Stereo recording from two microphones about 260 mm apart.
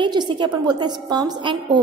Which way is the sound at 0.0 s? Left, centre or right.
Centre.